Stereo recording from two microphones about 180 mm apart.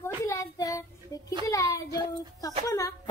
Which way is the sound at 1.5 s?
20° left (ahead or behind).